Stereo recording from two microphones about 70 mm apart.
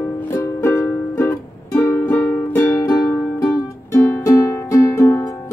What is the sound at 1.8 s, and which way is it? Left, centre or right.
Music, left.